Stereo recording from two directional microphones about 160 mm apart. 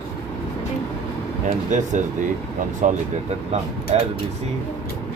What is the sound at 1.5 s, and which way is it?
Speech, 50° right (ahead or behind).